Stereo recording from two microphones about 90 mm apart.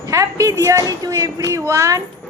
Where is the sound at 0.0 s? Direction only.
35° right (ahead or behind).